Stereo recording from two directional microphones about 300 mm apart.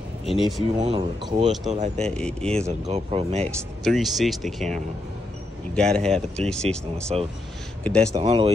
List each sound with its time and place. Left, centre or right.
0.2 s speech: centre
0.7 s speech: centre
2.0 s speech: centre
2.9 s speech: centre
3.4 s speech: centre
8.1 s speech: centre